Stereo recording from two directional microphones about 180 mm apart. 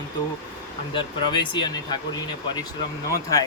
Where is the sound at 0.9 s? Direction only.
25° left (ahead or behind).